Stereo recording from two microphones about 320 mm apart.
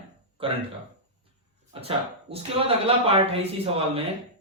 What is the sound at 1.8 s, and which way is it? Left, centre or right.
Speech, centre.